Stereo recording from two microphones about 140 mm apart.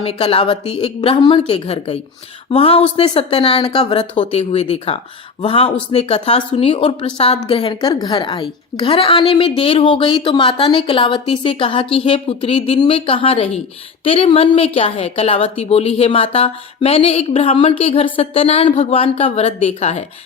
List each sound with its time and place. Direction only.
0.0 s a woman's voice: 45° left (ahead or behind)
4.2 s a woman's voice: 50° left (ahead or behind)